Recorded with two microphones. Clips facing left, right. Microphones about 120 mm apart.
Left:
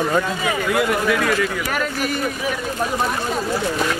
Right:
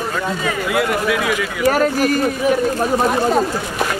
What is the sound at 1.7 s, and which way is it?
Speech, 40° right (ahead or behind).